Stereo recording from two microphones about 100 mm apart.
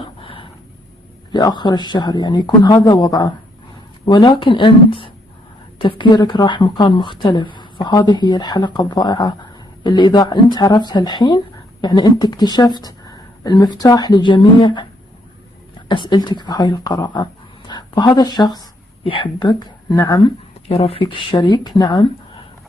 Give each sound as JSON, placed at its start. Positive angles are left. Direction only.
{"t": 0.0, "sound": "a sound", "side_deg": 60}
{"t": 1.3, "sound": "speech", "side_deg": 45}
{"t": 15.9, "sound": "speech", "side_deg": 50}
{"t": 19.0, "sound": "speech", "side_deg": 60}
{"t": 20.6, "sound": "speech", "side_deg": 75}
{"t": 21.0, "sound": "speech", "side_deg": 50}